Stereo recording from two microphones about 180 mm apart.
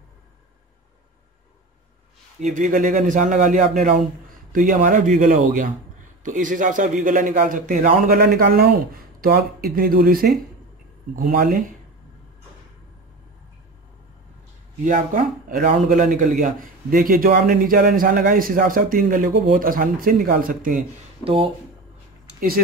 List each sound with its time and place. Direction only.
2.4 s a man's voice: 45° right (ahead or behind)
14.9 s a man's voice: 50° right (ahead or behind)
21.2 s speech: 30° right (ahead or behind)